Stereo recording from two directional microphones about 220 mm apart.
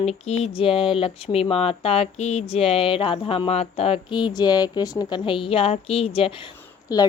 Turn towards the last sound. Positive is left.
turn(degrees=15)  # may be behind; listen again after turning